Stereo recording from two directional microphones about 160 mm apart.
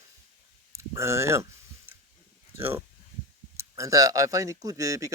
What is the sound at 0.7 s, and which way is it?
Speech, 15° right (ahead or behind).